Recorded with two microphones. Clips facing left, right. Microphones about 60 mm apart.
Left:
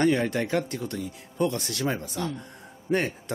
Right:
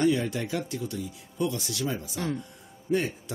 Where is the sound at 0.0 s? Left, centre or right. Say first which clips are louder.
Left 2 dB; left.